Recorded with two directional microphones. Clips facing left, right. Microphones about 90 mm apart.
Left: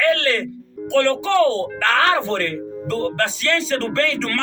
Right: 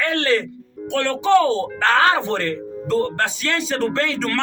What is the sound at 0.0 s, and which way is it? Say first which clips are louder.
Music: left 1 dB; 20° right (ahead or behind).